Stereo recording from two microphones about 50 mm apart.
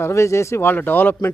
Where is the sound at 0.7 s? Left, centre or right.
Left.